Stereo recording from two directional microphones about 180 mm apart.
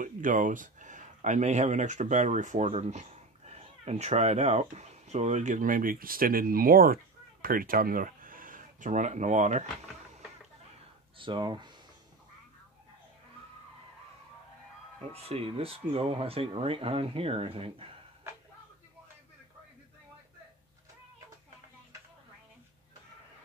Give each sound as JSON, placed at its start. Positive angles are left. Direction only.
{"t": 0.0, "sound": "speech", "side_deg": -45}
{"t": 11.1, "sound": "speech", "side_deg": -25}
{"t": 15.0, "sound": "speech", "side_deg": -35}